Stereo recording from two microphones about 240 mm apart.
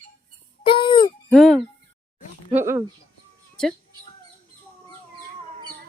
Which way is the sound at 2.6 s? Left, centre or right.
Centre.